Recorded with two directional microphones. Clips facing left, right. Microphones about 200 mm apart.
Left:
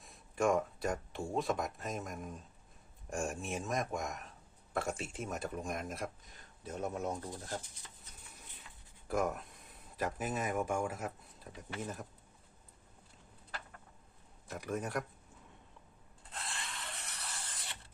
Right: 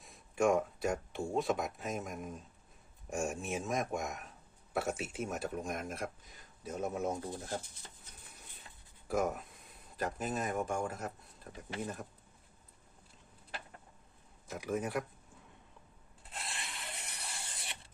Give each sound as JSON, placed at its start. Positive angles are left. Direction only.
{"t": 0.0, "sound": "speech", "side_deg": 0}
{"t": 7.3, "sound": "speech", "side_deg": -25}
{"t": 9.0, "sound": "speech", "side_deg": 0}
{"t": 14.4, "sound": "speech", "side_deg": 0}
{"t": 16.3, "sound": "rub", "side_deg": -10}